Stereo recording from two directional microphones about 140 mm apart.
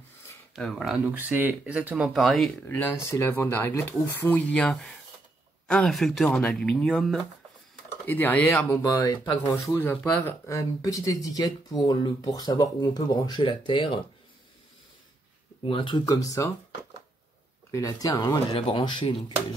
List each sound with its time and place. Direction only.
0.6 s speech: centre (ahead or behind)
1.1 s speech: 15° right (ahead or behind)
2.6 s speech: 15° left (ahead or behind)
8.8 s speech: 25° left (ahead or behind)
9.2 s speech: 10° left (ahead or behind); by 13.9 s 35° left (ahead or behind)
15.6 s speech: 40° left (ahead or behind)
16.1 s speech: 25° left (ahead or behind)
17.6 s speech: 25° left (ahead or behind)
18.5 s speech: 35° left (ahead or behind)